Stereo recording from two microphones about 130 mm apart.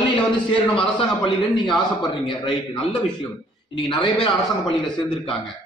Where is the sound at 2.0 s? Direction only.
40° left (ahead or behind).